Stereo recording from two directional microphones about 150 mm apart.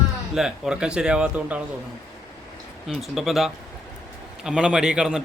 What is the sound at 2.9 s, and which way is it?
A man's voice, centre (ahead or behind).